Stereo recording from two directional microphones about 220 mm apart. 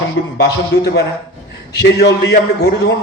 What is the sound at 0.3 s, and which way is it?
A man's voice, 50° left (ahead or behind).